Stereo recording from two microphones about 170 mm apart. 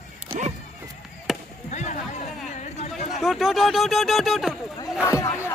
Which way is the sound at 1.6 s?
45° left (ahead or behind).